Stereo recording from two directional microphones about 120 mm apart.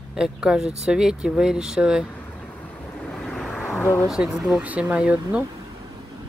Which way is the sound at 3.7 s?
20° left (ahead or behind).